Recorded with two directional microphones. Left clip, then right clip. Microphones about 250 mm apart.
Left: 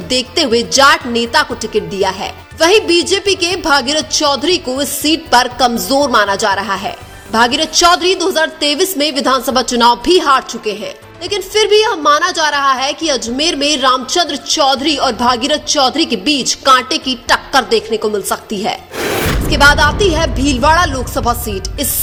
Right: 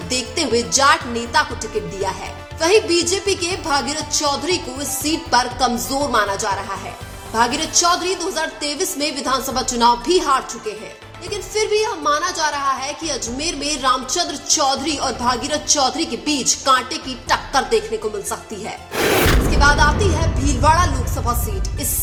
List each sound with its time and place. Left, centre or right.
0.1 s a woman's voice: left
18.9 s gasp: centre
19.5 s speech: left